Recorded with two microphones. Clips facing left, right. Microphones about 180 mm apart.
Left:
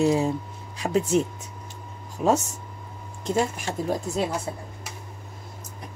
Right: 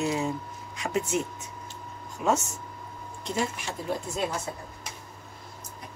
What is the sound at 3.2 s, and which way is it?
Speech, 50° left (ahead or behind).